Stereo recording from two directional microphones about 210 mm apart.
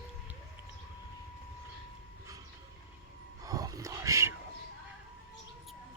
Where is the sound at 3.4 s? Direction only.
15° right (ahead or behind).